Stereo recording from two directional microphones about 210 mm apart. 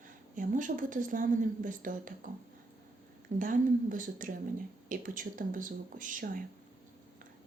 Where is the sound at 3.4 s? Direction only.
40° right (ahead or behind).